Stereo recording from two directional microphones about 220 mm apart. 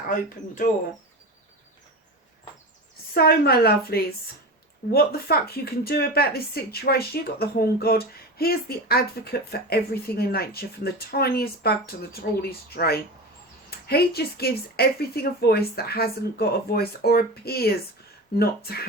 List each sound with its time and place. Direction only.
0.1 s speech: 35° left (ahead or behind)
3.2 s speech: 45° left (ahead or behind)